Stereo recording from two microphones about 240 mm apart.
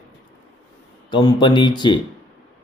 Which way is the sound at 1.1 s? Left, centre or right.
Centre.